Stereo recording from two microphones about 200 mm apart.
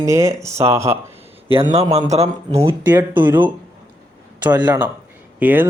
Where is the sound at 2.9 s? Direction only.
10° right (ahead or behind).